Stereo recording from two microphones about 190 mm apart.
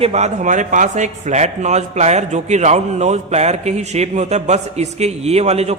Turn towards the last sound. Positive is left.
turn(degrees=-35)  # may be behind; listen again after turning